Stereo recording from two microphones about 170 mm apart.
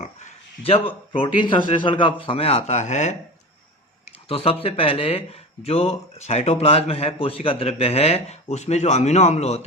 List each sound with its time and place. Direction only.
0.0 s speech: 40° left (ahead or behind)
4.3 s speech: 35° left (ahead or behind)